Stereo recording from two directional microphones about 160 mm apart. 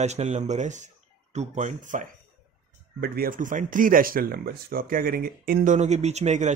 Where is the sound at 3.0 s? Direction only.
70° right (ahead or behind).